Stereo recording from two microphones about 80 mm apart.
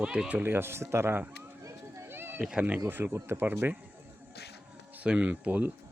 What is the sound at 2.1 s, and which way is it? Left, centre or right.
Cat, right.